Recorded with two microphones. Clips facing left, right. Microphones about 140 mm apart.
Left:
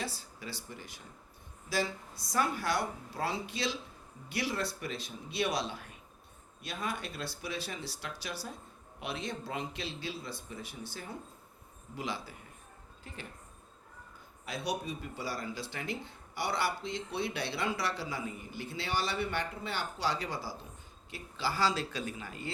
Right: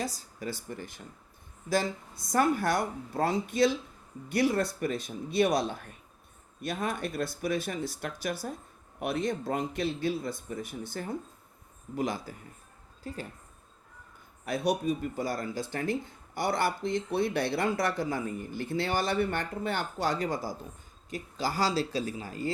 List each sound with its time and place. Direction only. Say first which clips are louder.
0.0 s speech: right 5 dB; 40° right (ahead or behind)
14.4 s speech: right 8 dB; 50° right (ahead or behind)